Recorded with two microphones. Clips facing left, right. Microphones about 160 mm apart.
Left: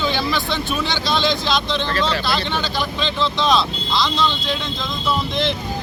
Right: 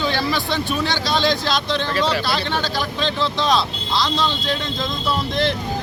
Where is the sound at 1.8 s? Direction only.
10° right (ahead or behind).